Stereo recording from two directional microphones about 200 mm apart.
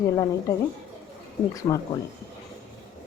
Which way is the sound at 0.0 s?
20° left (ahead or behind).